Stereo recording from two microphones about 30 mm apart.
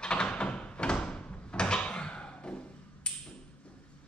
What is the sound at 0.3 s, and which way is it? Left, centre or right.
Thump, left.